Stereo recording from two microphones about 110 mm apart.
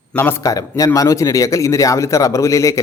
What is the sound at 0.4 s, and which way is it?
A man's voice, 30° left (ahead or behind).